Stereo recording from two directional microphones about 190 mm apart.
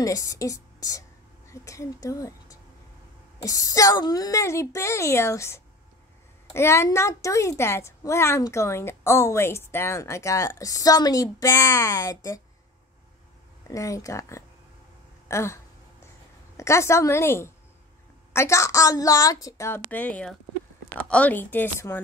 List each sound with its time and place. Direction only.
0.0 s a woman's voice: 15° left (ahead or behind)
13.7 s a woman's voice: 15° left (ahead or behind)
15.2 s a sound: 15° left (ahead or behind)
16.5 s a woman's voice: 15° left (ahead or behind)